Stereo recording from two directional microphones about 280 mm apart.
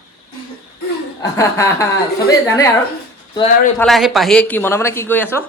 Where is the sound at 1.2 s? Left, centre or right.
Centre.